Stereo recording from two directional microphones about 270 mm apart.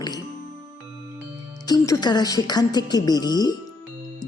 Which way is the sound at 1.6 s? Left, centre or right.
Centre.